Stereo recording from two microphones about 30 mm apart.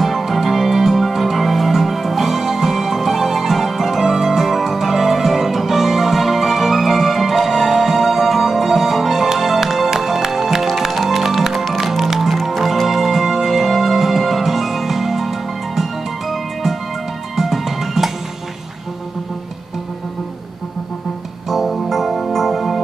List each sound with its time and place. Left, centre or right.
0.0 s music: centre
21.5 s music: centre